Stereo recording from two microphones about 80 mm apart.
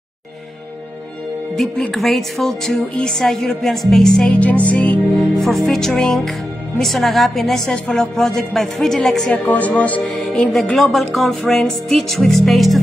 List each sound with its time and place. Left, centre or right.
2.0 s music: centre
4.4 s speech: centre
5.1 s music: centre
9.3 s speech: centre
10.1 s music: centre